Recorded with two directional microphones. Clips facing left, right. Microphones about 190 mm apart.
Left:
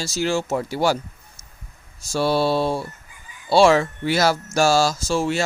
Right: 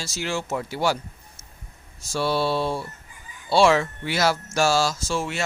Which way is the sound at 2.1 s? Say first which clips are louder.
Left 4 dB; 40° left (ahead or behind).